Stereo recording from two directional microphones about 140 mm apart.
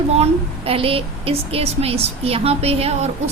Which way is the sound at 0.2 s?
45° right (ahead or behind).